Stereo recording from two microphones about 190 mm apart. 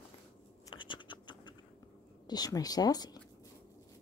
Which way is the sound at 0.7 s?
25° left (ahead or behind).